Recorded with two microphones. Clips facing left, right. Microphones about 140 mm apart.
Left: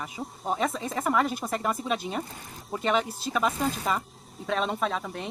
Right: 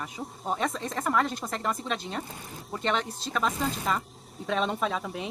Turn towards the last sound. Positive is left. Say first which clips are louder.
# even
turn(degrees=0)  # may be behind; listen again after turning